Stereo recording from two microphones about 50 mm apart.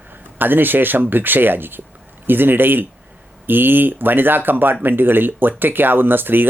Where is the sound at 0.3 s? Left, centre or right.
Right.